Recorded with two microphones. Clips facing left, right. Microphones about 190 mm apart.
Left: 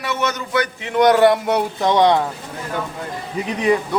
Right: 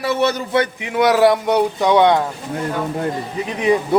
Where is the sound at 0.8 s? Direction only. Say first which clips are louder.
Left 2 dB; 5° right (ahead or behind).